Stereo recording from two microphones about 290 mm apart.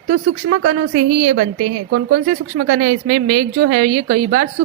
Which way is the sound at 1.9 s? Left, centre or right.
Right.